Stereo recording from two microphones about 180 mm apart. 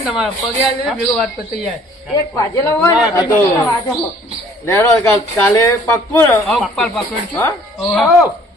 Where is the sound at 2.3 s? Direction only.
15° left (ahead or behind).